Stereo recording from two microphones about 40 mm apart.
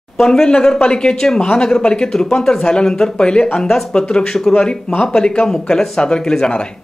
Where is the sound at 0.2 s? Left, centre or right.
Centre.